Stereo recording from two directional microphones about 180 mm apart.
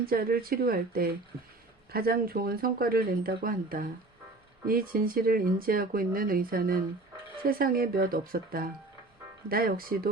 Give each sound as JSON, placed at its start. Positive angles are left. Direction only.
{"t": 0.0, "sound": "speech", "side_deg": -55}